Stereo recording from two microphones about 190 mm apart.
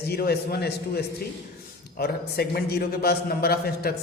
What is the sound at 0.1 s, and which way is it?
A man's voice, 55° left (ahead or behind).